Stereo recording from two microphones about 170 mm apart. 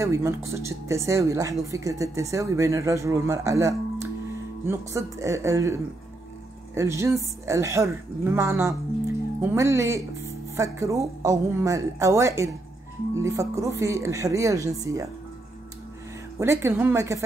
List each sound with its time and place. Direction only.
0.0 s speech: 15° right (ahead or behind)
16.3 s speech: 15° right (ahead or behind)